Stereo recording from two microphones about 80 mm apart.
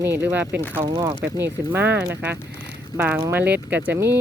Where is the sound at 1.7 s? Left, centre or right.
Right.